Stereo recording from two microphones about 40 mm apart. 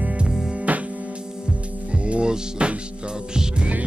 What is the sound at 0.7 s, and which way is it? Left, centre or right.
Music, right.